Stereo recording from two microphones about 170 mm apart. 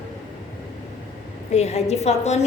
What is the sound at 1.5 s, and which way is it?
Speech, 40° left (ahead or behind).